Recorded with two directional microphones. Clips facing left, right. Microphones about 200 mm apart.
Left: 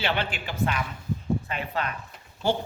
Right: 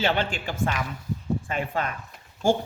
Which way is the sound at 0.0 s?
45° right (ahead or behind).